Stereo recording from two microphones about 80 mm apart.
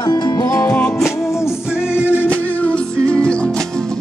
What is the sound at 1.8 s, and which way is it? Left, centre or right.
Music, left.